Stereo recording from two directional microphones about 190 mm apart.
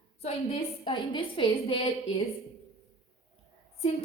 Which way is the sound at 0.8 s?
25° left (ahead or behind).